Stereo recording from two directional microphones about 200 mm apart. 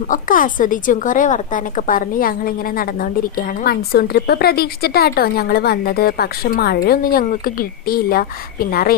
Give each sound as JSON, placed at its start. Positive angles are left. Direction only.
{"t": 0.1, "sound": "a woman's voice", "side_deg": 40}